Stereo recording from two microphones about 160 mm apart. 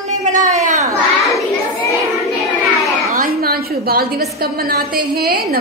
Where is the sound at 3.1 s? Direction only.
70° right (ahead or behind).